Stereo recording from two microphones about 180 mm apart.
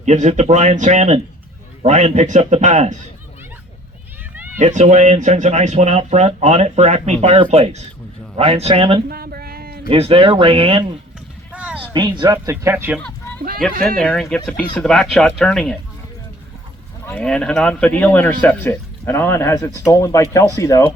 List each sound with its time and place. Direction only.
0.0 s speech: 40° right (ahead or behind)
4.5 s speech: 40° right (ahead or behind)
9.0 s a sound: 55° right (ahead or behind)
9.9 s speech: 30° right (ahead or behind)
11.5 s a sound: 5° right (ahead or behind)
11.9 s speech: 25° right (ahead or behind)
14.0 s speech: 5° left (ahead or behind)
17.1 s a man's voice: 5° left (ahead or behind)